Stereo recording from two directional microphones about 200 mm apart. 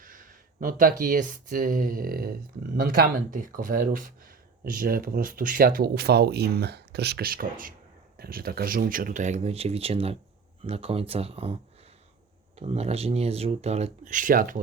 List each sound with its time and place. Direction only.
0.0 s speech: 45° right (ahead or behind)
12.5 s speech: 30° right (ahead or behind)